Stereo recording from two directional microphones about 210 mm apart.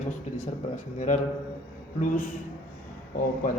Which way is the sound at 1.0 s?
35° left (ahead or behind).